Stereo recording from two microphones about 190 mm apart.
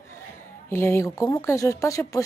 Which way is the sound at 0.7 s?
10° left (ahead or behind).